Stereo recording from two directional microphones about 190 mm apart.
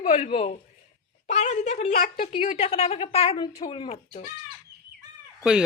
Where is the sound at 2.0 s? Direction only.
50° left (ahead or behind).